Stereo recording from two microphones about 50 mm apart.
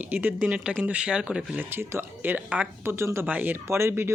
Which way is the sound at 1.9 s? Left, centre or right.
Right.